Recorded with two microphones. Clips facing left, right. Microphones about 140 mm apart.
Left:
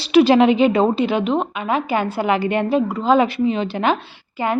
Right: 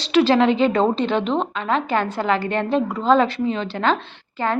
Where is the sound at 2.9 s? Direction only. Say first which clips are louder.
Left 1 dB; centre (ahead or behind).